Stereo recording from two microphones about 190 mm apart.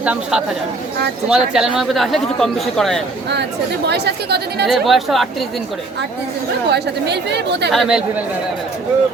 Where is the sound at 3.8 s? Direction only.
60° right (ahead or behind).